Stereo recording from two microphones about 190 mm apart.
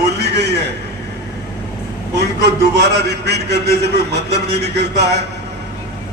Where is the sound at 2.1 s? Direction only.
60° right (ahead or behind).